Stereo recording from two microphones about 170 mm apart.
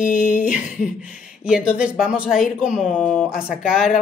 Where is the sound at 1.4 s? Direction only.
5° right (ahead or behind).